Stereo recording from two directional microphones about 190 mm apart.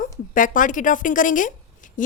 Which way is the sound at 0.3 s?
45° left (ahead or behind).